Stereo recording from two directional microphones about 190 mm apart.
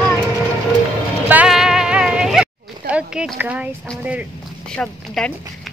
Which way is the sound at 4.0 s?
5° right (ahead or behind).